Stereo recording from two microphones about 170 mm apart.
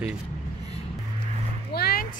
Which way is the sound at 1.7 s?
70° left (ahead or behind).